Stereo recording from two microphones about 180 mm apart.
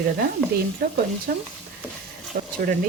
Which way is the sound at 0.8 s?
60° right (ahead or behind).